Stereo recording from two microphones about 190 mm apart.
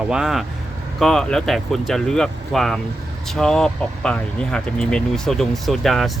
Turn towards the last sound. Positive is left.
turn(degrees=0)  # may be behind; listen again after turning